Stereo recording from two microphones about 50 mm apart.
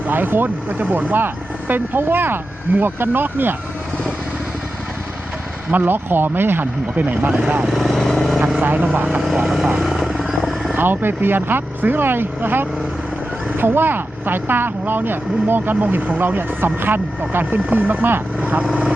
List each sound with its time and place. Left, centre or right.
0.1 s speech: right
1.1 s speech: right
5.7 s speech: right
7.7 s speech: centre
8.0 s speech: centre
8.6 s speech: right
9.5 s speech: centre
9.8 s helicopter: centre
10.8 s speech: right
16.2 s speech: right
18.6 s speech: right